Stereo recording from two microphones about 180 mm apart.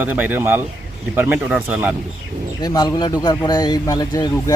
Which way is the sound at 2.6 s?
20° left (ahead or behind).